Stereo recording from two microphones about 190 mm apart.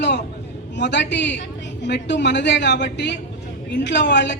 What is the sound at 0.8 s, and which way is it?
A man's voice, 65° left (ahead or behind).